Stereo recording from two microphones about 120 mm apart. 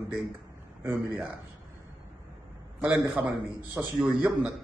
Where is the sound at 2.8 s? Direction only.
10° right (ahead or behind).